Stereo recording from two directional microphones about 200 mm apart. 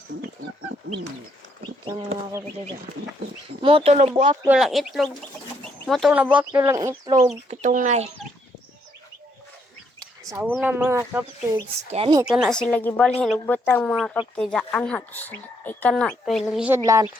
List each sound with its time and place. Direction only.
1.9 s speech: 25° right (ahead or behind)
3.6 s speech: 25° right (ahead or behind)
4.4 s a woman's voice: 5° right (ahead or behind)
6.5 s speech: 15° right (ahead or behind)
7.6 s speech: 40° right (ahead or behind)
10.0 s chicken: 15° right (ahead or behind)
10.5 s speech: 5° right (ahead or behind)
11.5 s speech: 25° right (ahead or behind)
12.2 s a woman's voice: 5° right (ahead or behind)